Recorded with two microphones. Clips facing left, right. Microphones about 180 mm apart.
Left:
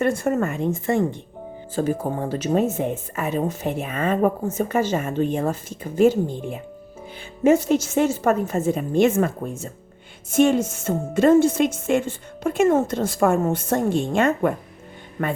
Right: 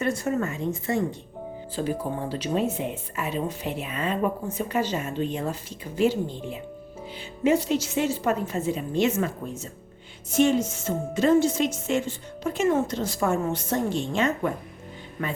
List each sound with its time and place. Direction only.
0.0 s a woman's voice: 55° left (ahead or behind)